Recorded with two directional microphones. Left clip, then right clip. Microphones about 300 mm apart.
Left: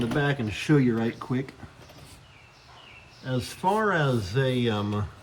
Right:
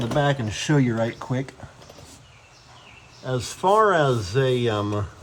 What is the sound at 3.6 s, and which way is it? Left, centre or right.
Speech, centre.